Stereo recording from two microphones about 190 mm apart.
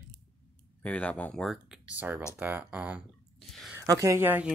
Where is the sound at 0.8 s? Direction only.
5° left (ahead or behind).